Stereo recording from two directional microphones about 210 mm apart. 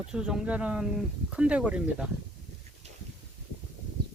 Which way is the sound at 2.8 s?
30° right (ahead or behind).